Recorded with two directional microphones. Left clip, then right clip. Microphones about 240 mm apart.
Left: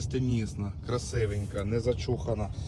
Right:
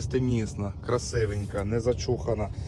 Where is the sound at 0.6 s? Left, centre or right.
Centre.